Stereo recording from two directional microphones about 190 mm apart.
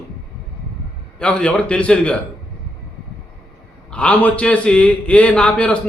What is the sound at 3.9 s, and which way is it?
A man's voice, 5° left (ahead or behind).